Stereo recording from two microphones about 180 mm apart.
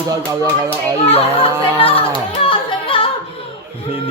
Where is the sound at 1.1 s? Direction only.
30° left (ahead or behind).